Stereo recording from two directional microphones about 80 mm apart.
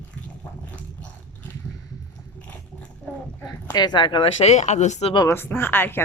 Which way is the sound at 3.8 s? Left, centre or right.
Left.